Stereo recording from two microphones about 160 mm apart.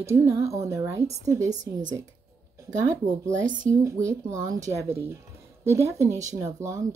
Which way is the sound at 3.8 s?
20° right (ahead or behind).